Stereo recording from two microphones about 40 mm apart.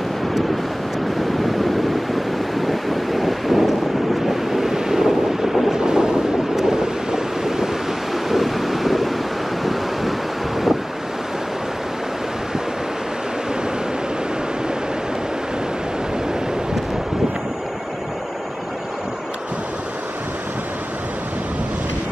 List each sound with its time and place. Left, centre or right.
2.1 s wind noise: centre
5.8 s train: centre
6.5 s waves: centre
8.3 s wind noise: centre
9.6 s waves: centre